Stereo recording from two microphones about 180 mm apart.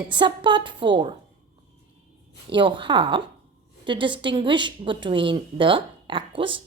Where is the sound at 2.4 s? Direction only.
25° right (ahead or behind).